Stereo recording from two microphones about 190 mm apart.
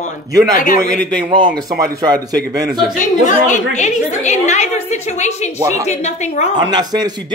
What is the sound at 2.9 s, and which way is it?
A woman's voice, 40° left (ahead or behind).